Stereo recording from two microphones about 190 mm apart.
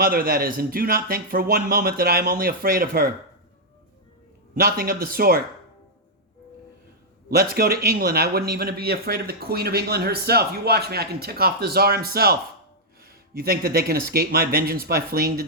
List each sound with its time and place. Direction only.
0.0 s speech: 50° right (ahead or behind)
4.5 s speech: 50° right (ahead or behind)
7.3 s a man's voice: 55° right (ahead or behind)